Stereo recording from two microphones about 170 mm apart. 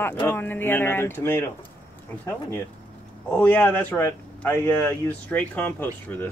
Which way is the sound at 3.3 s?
10° left (ahead or behind).